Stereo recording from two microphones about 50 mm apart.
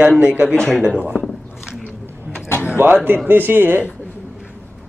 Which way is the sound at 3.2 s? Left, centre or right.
Right.